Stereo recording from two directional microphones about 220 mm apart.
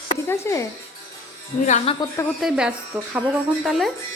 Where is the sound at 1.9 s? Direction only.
25° left (ahead or behind).